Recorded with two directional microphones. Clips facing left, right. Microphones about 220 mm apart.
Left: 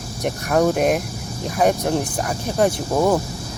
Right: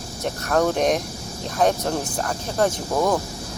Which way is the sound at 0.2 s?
15° left (ahead or behind).